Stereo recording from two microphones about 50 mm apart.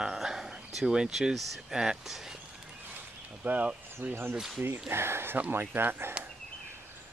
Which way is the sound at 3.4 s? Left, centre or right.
Right.